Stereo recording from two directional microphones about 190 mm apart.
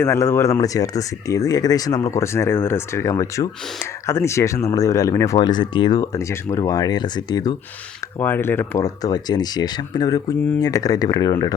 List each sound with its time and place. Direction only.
0.0 s speech: 15° left (ahead or behind)